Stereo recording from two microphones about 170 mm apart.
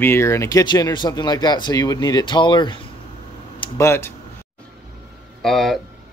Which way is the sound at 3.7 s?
15° left (ahead or behind).